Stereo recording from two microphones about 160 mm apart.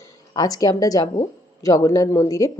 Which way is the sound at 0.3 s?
25° left (ahead or behind).